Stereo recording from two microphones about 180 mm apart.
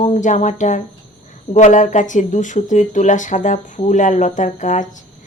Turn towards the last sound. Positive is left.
turn(degrees=45)  # may be behind; listen again after turning